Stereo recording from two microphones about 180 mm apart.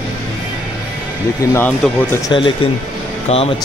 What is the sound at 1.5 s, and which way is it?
Speech, 10° left (ahead or behind).